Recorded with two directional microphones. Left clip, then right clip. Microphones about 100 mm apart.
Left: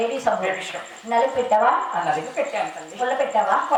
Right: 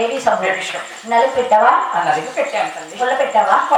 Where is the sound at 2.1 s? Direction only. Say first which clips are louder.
Right 6 dB; 15° left (ahead or behind).